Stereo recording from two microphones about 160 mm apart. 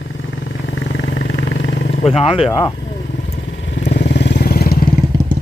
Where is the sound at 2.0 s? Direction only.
35° left (ahead or behind).